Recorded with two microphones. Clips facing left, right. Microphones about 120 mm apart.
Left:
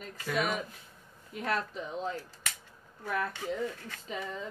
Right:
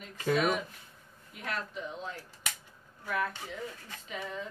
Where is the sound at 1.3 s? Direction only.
40° left (ahead or behind).